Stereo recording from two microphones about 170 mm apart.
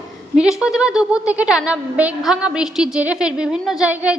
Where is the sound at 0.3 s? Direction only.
5° right (ahead or behind).